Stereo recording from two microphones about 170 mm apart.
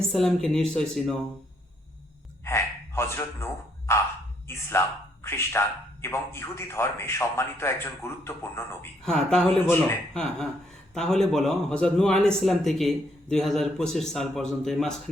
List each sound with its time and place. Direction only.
0.0 s a man's voice: centre (ahead or behind)
2.4 s a sound: 15° left (ahead or behind)
4.5 s a man's voice: 15° left (ahead or behind)
9.0 s a man's voice: 5° left (ahead or behind)
9.6 s a man's voice: 15° left (ahead or behind)
10.9 s a man's voice: 5° left (ahead or behind)